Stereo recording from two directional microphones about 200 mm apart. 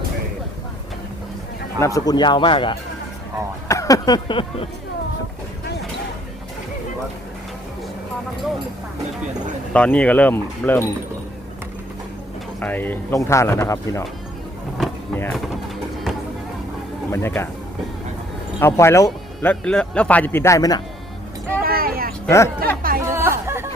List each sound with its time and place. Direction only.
1.8 s speech: 15° left (ahead or behind)
9.7 s speech: 5° left (ahead or behind)
12.5 s speech: 10° left (ahead or behind)
15.1 s a sound: 10° left (ahead or behind)
17.1 s speech: 10° left (ahead or behind)
18.6 s speech: 15° left (ahead or behind)
21.6 s vehicle: 45° right (ahead or behind)
22.3 s speech: 10° left (ahead or behind)
23.0 s music: 15° right (ahead or behind)